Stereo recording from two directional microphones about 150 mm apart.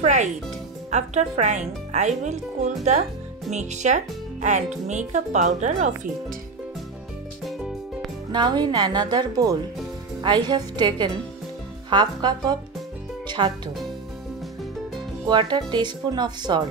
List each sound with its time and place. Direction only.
0.0 s music: 50° right (ahead or behind)
0.8 s speech: 50° right (ahead or behind)
8.3 s speech: 30° right (ahead or behind)
15.2 s speech: 30° right (ahead or behind)